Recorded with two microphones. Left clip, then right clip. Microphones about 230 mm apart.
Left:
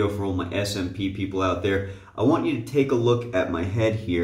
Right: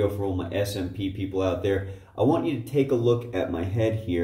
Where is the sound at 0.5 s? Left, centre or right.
Centre.